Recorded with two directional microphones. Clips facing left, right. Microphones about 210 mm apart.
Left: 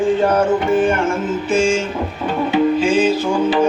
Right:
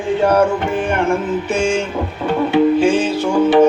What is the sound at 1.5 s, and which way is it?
Music, 60° right (ahead or behind).